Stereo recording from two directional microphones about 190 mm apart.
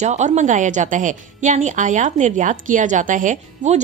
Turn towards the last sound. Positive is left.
turn(degrees=-40)  # may be behind; listen again after turning